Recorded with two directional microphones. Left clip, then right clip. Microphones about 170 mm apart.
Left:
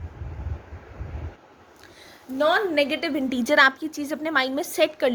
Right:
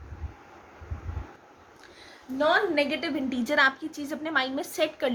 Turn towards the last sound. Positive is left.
turn(degrees=55)  # may be behind; listen again after turning